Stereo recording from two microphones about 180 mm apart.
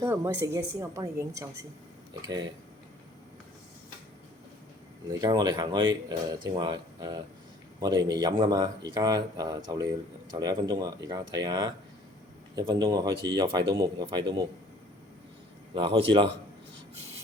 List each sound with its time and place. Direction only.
0.0 s a woman's voice: 15° right (ahead or behind)
5.2 s speech: 20° right (ahead or behind)
15.7 s speech: 25° right (ahead or behind)